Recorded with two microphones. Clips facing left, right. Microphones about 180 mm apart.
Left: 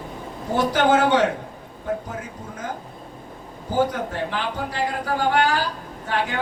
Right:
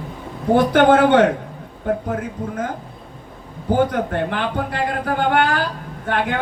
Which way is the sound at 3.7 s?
55° right (ahead or behind).